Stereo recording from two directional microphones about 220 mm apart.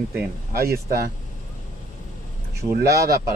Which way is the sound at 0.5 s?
45° right (ahead or behind).